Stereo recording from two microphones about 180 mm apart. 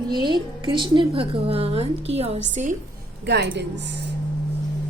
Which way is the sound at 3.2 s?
70° right (ahead or behind).